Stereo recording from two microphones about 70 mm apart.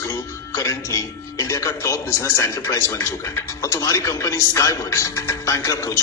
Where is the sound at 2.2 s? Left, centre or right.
Left.